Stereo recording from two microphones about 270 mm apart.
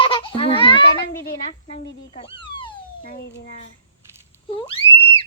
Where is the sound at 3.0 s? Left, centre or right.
Left.